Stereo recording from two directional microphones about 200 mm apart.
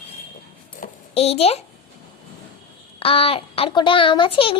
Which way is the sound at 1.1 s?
30° left (ahead or behind).